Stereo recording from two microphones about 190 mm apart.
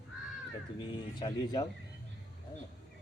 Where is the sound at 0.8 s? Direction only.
20° left (ahead or behind).